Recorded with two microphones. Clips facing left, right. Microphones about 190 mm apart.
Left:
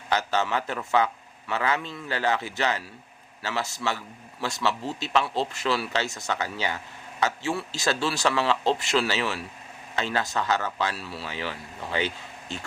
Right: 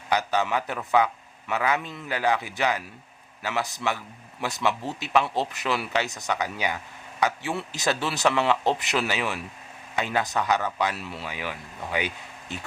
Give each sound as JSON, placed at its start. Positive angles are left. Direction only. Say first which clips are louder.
{"t": 0.1, "sound": "speech", "louder": "right 1 dB", "side_deg": -15}